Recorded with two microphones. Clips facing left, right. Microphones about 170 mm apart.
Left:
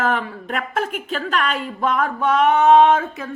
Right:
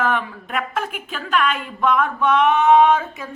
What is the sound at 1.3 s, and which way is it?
Speech, 35° left (ahead or behind).